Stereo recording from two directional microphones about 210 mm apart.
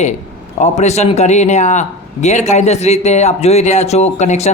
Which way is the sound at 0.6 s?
30° left (ahead or behind).